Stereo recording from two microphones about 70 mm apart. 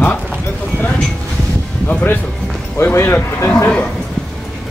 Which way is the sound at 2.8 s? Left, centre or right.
Left.